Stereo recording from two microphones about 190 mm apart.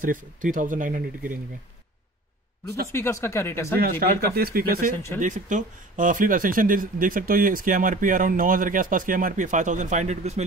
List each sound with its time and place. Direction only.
0.0 s speech: 45° right (ahead or behind)
2.9 s speech: 15° left (ahead or behind)
4.0 s speech: 50° right (ahead or behind)
4.9 s speech: 10° left (ahead or behind)
5.2 s speech: 40° right (ahead or behind)